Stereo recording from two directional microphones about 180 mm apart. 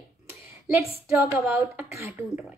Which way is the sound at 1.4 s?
15° right (ahead or behind).